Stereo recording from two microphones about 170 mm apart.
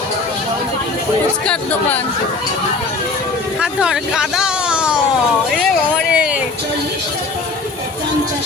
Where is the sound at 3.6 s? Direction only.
5° right (ahead or behind).